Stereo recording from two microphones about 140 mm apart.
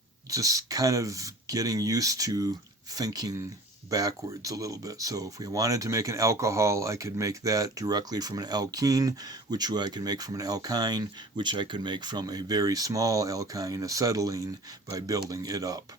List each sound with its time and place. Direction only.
0.3 s speech: 25° right (ahead or behind)